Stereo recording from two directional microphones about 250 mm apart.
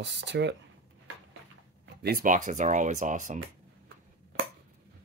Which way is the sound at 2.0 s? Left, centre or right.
Right.